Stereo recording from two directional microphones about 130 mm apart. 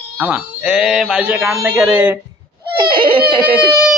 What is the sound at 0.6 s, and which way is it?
Mantra, 5° right (ahead or behind).